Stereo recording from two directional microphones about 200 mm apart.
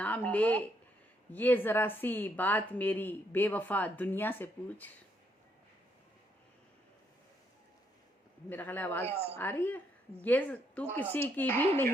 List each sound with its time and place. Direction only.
0.0 s speech: 5° left (ahead or behind)
8.4 s speech: 10° left (ahead or behind)
9.0 s a woman's voice: 30° right (ahead or behind)
9.3 s speech: 10° left (ahead or behind)